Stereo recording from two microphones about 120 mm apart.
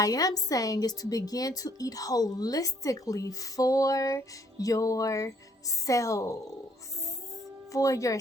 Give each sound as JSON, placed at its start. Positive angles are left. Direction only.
{"t": 0.0, "sound": "a woman's voice", "side_deg": 30}
{"t": 7.7, "sound": "a woman's voice", "side_deg": 25}